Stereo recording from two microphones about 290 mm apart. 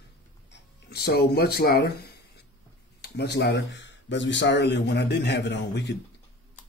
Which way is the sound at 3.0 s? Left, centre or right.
Left.